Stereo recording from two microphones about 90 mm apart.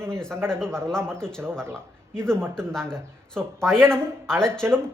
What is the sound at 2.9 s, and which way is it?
Speech, 5° left (ahead or behind).